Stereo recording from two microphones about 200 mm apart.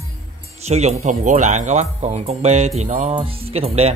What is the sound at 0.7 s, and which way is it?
Speech, 35° right (ahead or behind).